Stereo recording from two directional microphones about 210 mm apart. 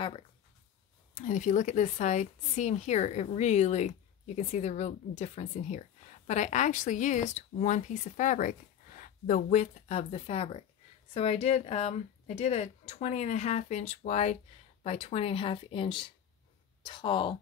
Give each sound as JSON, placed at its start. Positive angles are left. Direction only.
{"t": 1.1, "sound": "a woman's voice", "side_deg": 35}